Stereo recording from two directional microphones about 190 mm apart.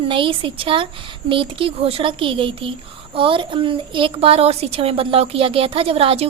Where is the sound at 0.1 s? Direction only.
25° right (ahead or behind).